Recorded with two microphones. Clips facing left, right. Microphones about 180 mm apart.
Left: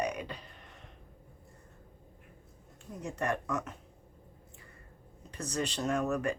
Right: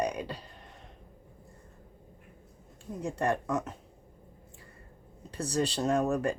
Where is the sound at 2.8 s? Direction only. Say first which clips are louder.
Right 4 dB; 30° right (ahead or behind).